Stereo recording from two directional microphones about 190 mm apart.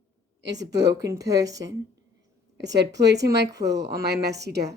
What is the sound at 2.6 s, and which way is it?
A woman's voice, 65° right (ahead or behind).